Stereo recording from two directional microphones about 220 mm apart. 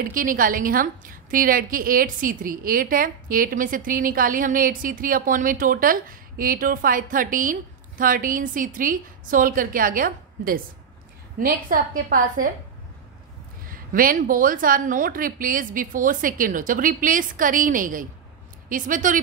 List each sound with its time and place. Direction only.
0.0 s a woman's voice: 40° right (ahead or behind)
13.7 s a woman's voice: 40° right (ahead or behind)